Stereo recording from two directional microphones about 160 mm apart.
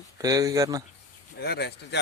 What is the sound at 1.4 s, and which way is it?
Speech, 90° left.